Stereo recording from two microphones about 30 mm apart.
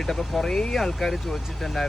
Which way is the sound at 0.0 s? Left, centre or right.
Centre.